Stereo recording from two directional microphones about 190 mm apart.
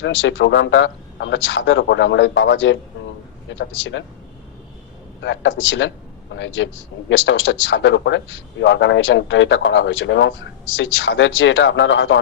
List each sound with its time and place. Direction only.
0.0 s speech: 80° left
5.2 s speech: 75° left (ahead or behind)